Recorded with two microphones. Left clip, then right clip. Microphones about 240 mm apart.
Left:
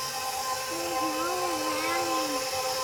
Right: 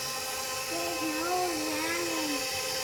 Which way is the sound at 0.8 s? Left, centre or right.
Centre.